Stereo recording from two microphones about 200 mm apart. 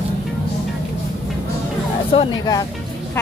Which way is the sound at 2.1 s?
20° left (ahead or behind).